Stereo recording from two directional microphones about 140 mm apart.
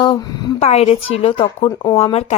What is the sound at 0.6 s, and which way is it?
Speech, 50° left (ahead or behind).